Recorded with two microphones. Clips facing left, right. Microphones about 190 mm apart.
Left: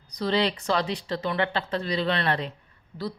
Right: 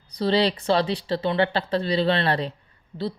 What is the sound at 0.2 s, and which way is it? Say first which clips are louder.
Speech: right 4 dB; 30° right (ahead or behind).